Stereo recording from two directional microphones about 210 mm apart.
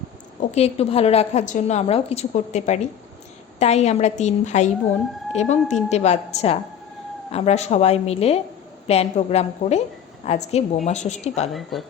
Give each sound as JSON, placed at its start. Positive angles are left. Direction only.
{"t": 0.5, "sound": "a woman's voice", "side_deg": 30}
{"t": 11.5, "sound": "a woman's voice", "side_deg": 0}